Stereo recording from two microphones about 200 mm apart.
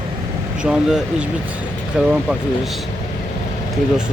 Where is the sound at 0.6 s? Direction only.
5° right (ahead or behind).